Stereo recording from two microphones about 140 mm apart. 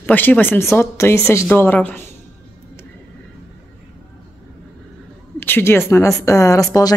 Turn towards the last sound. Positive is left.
turn(degrees=25)  # may be behind; listen again after turning